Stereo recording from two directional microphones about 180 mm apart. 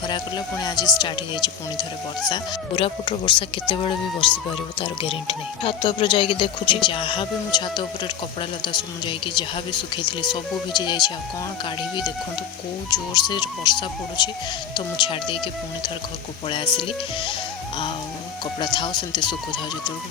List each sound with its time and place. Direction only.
0.1 s speech: 25° left (ahead or behind)
12.9 s speech: 25° left (ahead or behind)
16.7 s speech: 30° left (ahead or behind)
18.6 s speech: 25° left (ahead or behind)